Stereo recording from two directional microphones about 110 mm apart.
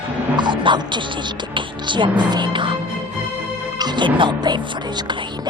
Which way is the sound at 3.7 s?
40° right (ahead or behind).